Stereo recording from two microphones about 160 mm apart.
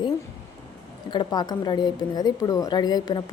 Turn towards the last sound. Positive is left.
turn(degrees=25)  # may be behind; listen again after turning